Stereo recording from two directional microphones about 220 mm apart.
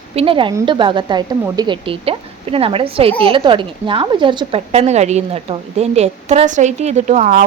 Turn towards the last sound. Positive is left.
turn(degrees=-35)  # may be behind; listen again after turning